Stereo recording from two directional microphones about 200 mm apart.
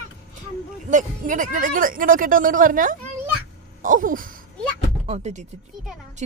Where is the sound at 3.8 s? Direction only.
40° right (ahead or behind).